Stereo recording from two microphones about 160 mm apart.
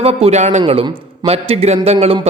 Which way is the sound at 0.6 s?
35° right (ahead or behind).